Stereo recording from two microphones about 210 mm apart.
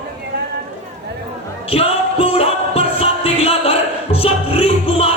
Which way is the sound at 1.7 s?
25° left (ahead or behind).